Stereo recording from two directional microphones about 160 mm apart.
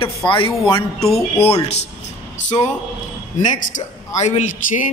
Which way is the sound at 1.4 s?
40° left (ahead or behind).